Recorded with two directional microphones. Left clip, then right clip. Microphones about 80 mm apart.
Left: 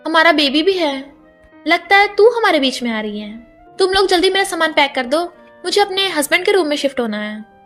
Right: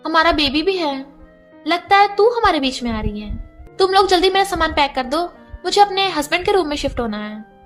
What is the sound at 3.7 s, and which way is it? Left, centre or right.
A woman's voice, left.